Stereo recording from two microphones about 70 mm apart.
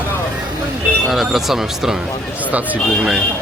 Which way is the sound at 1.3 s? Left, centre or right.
Centre.